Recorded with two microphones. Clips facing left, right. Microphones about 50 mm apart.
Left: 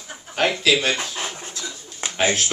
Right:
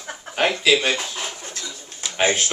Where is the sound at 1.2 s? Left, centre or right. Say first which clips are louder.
Left 1 dB; left.